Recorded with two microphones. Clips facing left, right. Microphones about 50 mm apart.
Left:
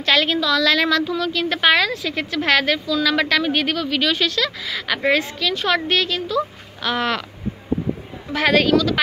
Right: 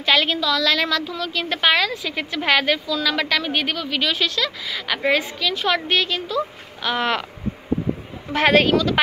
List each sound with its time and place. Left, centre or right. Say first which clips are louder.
0.0 s a woman's voice: left 1 dB; centre
2.0 s a woman's voice: left 2 dB; centre
8.3 s a woman's voice: even; right